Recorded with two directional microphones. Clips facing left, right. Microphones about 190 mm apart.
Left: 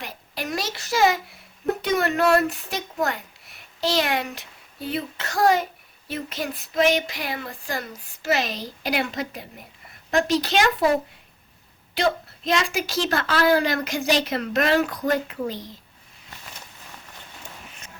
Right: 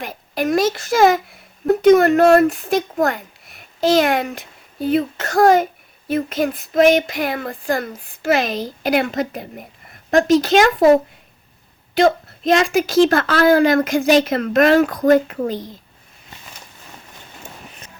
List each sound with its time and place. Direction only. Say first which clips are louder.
0.0 s a woman's voice: right 10 dB; 50° right (ahead or behind)
11.9 s a woman's voice: right 8 dB; 50° right (ahead or behind)